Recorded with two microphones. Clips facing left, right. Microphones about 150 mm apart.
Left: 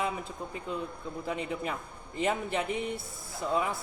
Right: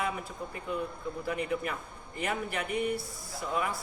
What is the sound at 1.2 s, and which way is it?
A man's voice, 25° left (ahead or behind).